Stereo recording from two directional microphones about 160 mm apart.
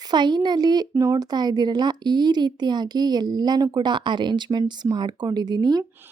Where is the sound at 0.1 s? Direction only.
25° right (ahead or behind).